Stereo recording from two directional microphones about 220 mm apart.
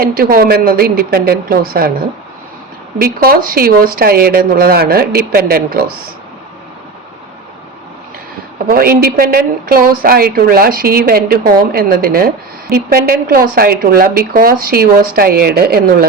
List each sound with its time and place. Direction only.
0.0 s a woman's voice: 45° right (ahead or behind)
3.0 s a woman's voice: 40° right (ahead or behind)
8.7 s a woman's voice: 40° right (ahead or behind)